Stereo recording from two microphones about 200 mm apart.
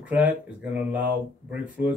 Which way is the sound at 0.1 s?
5° right (ahead or behind).